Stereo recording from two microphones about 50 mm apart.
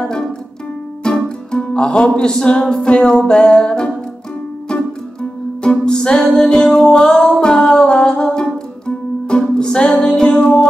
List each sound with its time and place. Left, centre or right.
1.0 s music: centre